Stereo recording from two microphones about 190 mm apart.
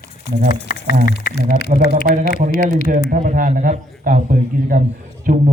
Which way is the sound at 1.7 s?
45° right (ahead or behind).